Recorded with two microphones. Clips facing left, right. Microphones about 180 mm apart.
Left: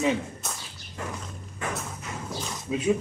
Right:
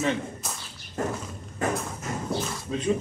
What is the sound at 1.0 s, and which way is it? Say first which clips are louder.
Walk: right 7 dB; 45° right (ahead or behind).